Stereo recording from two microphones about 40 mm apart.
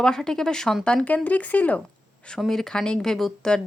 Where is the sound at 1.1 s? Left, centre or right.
Left.